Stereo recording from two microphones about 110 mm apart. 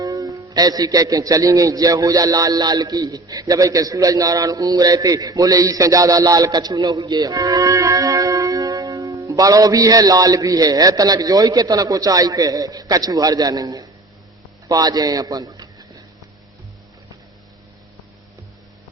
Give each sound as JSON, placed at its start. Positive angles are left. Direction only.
{"t": 0.0, "sound": "a man's voice", "side_deg": -35}